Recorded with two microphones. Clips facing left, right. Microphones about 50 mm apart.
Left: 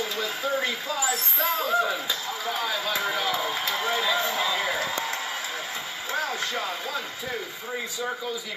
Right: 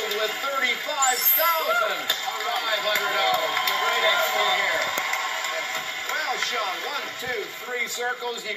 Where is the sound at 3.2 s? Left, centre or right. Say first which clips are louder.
Right 4 dB; right.